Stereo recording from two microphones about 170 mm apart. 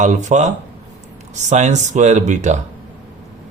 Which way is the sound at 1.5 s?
45° right (ahead or behind).